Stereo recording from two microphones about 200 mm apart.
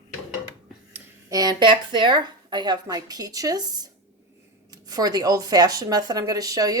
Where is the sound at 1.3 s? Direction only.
20° right (ahead or behind).